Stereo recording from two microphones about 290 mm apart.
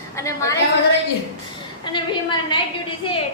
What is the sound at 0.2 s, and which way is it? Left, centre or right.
Speech, centre.